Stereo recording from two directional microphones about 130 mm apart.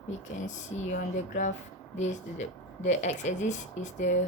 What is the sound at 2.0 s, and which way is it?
A woman's voice, 65° left (ahead or behind).